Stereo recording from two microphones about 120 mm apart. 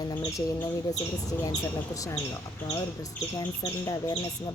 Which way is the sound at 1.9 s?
25° left (ahead or behind).